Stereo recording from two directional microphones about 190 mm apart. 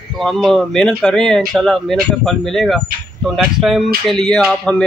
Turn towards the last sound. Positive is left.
turn(degrees=5)  # may be behind; listen again after turning